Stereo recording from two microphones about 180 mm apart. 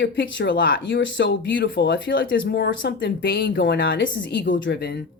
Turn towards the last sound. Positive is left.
turn(degrees=65)  # may be behind; listen again after turning